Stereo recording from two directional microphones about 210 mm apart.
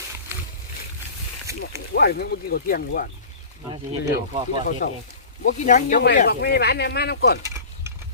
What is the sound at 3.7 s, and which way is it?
Speech, 20° right (ahead or behind).